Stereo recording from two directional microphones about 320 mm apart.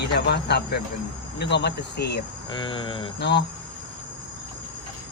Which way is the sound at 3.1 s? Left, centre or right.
Left.